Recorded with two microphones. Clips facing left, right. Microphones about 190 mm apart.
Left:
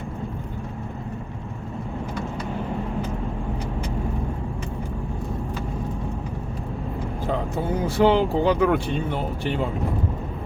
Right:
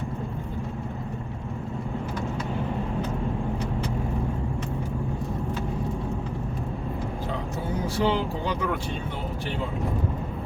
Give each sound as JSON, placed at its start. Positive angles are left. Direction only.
{"t": 7.9, "sound": "speech", "side_deg": 55}